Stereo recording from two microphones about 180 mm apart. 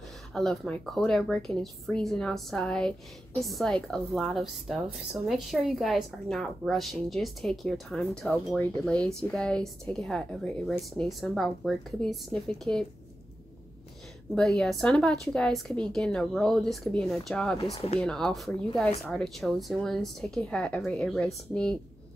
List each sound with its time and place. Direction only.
0.3 s a woman's voice: 5° left (ahead or behind)
14.3 s a woman's voice: 5° left (ahead or behind)
17.7 s speech: 35° left (ahead or behind)
18.0 s a woman's voice: 5° left (ahead or behind)